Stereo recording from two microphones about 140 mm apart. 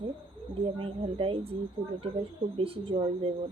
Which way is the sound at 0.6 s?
40° right (ahead or behind).